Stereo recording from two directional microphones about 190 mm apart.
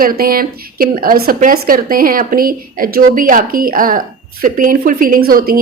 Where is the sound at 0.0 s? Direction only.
50° right (ahead or behind).